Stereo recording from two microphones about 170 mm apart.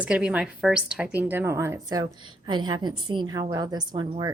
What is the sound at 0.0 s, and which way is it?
A woman's voice, 5° right (ahead or behind).